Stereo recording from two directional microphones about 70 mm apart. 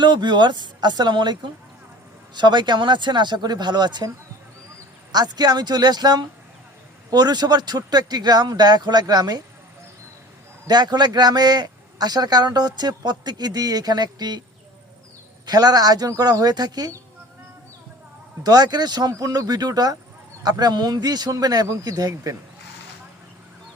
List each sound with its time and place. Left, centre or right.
0.0 s speech: right
5.1 s a man's voice: right
7.1 s a man's voice: right
10.7 s a man's voice: right
15.4 s speech: right
18.4 s speech: right